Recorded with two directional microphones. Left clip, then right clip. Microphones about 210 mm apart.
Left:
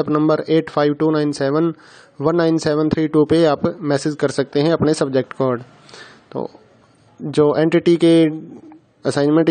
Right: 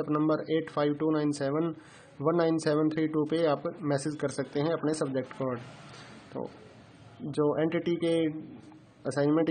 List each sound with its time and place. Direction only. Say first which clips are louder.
0.0 s speech: left 11 dB; 40° left (ahead or behind)
7.2 s speech: left 13 dB; 40° left (ahead or behind)